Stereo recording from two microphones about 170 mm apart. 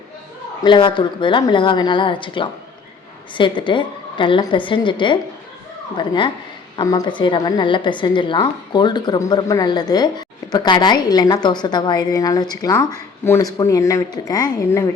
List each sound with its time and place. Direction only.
0.6 s a woman's voice: 30° left (ahead or behind)